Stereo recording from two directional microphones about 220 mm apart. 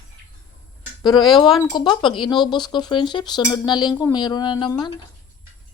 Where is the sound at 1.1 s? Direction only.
Centre (ahead or behind).